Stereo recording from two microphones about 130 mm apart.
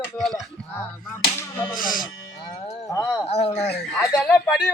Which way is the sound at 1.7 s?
90° left.